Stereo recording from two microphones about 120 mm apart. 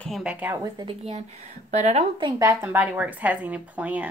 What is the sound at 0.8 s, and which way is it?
Speech, 60° right (ahead or behind).